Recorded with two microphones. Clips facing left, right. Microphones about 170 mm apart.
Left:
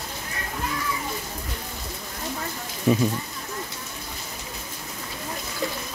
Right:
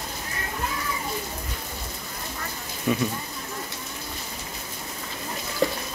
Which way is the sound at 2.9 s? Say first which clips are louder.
Left 4 dB; 30° left (ahead or behind).